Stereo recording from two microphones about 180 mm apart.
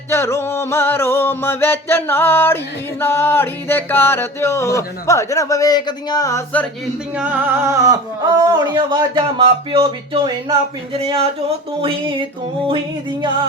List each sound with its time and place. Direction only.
0.1 s music: 15° left (ahead or behind)
7.2 s speech: 10° right (ahead or behind); by 12.1 s 30° right (ahead or behind)